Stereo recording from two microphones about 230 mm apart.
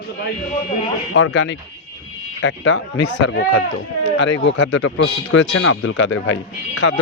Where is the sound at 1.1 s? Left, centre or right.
Left.